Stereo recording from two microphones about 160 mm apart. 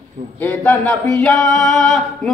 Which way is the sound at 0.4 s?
10° left (ahead or behind).